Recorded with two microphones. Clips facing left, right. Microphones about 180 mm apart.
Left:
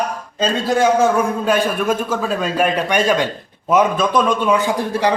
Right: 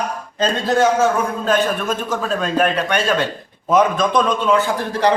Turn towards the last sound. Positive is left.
turn(degrees=15)  # may be behind; listen again after turning